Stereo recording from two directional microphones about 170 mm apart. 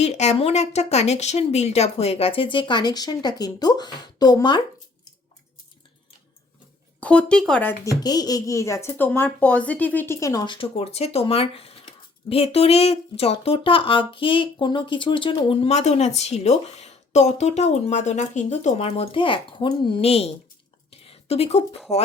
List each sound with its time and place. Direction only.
0.0 s speech: 40° left (ahead or behind); by 4.6 s 25° left (ahead or behind)
7.0 s speech: 5° left (ahead or behind)
8.0 s speech: 25° left (ahead or behind)
20.9 s a sound: 35° left (ahead or behind)